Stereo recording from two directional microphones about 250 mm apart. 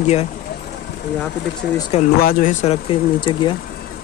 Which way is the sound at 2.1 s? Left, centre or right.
Left.